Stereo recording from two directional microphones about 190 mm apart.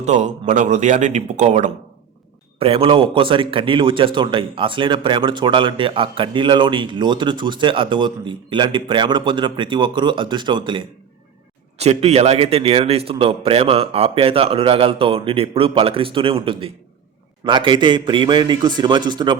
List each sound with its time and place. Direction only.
0.0 s speech: 40° right (ahead or behind)
2.6 s a man's voice: 30° right (ahead or behind)